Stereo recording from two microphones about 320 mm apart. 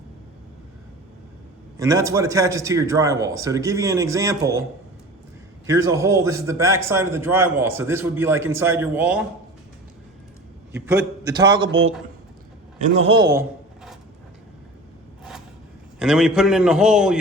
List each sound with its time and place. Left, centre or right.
1.8 s a man's voice: centre
5.6 s a man's voice: centre
10.8 s a man's voice: centre
11.7 s speech: right
12.8 s a man's voice: centre
15.2 s a sound: centre
16.0 s a man's voice: centre